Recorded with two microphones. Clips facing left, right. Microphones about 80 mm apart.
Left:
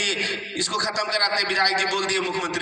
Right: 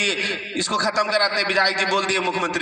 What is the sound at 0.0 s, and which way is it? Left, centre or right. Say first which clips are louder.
A man's voice: right 2 dB; right.